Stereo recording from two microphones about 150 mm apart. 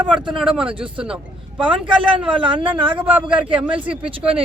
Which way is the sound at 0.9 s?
5° right (ahead or behind).